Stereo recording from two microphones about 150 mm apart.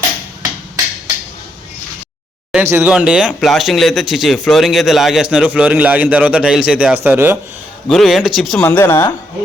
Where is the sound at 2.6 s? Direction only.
15° right (ahead or behind).